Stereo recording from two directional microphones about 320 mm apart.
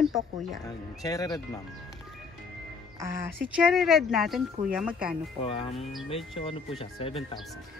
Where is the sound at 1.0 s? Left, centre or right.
Centre.